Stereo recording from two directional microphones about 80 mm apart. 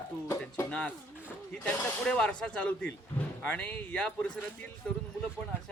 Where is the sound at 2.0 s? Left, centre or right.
Centre.